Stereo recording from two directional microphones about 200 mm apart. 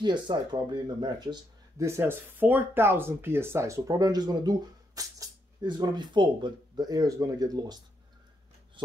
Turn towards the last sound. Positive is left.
turn(degrees=-20)  # may be behind; listen again after turning